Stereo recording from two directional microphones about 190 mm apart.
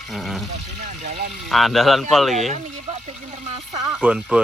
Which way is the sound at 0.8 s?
40° right (ahead or behind).